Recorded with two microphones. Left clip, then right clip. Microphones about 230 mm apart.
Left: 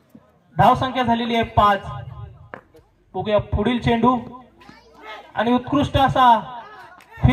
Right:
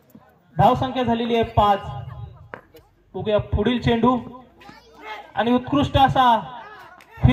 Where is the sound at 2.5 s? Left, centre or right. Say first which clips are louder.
Even; centre.